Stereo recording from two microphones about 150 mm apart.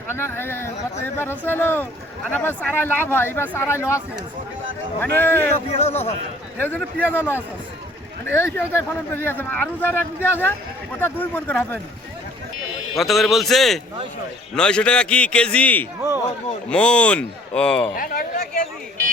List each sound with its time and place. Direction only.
0.1 s speech: 15° left (ahead or behind)
5.7 s speech: 45° left (ahead or behind)
6.6 s speech: 15° left (ahead or behind)
13.0 s a man's voice: centre (ahead or behind)
16.0 s a sound: 15° right (ahead or behind)
16.6 s speech: 5° left (ahead or behind)
17.9 s a man's voice: 70° left (ahead or behind)